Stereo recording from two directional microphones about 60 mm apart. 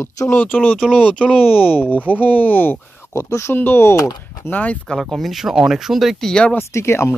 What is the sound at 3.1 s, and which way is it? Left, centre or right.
Speech, left.